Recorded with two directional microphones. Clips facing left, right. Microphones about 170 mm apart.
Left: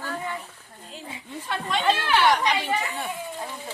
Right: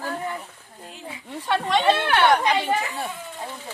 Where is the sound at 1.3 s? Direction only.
75° right (ahead or behind); by 2.7 s 55° right (ahead or behind).